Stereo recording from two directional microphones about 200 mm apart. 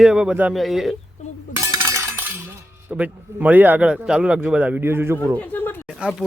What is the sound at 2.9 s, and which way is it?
A man's voice, 5° right (ahead or behind).